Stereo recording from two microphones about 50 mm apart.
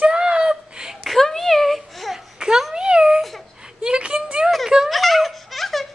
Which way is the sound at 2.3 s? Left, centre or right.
Centre.